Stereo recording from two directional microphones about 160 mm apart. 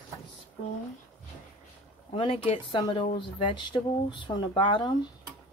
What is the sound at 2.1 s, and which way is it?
Speech, 35° left (ahead or behind).